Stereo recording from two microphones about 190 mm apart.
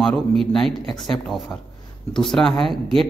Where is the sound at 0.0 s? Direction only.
Centre (ahead or behind).